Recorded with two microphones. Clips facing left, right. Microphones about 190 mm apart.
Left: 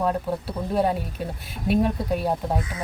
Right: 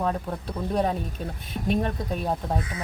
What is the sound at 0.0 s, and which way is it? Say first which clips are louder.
Speech: left 3 dB; 5° left (ahead or behind).